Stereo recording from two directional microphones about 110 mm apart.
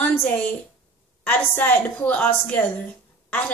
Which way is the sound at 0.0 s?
15° left (ahead or behind).